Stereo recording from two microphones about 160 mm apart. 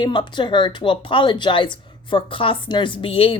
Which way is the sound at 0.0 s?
30° left (ahead or behind).